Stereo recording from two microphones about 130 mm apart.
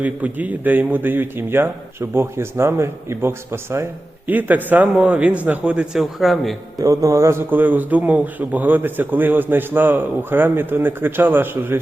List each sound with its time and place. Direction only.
0.0 s a man's voice: 10° right (ahead or behind)
6.7 s a man's voice: 25° right (ahead or behind)